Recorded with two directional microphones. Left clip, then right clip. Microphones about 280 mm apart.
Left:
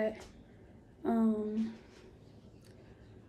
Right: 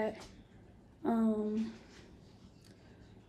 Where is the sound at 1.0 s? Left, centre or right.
Centre.